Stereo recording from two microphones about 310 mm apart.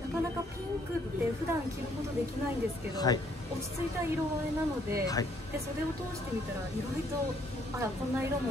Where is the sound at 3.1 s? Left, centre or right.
Centre.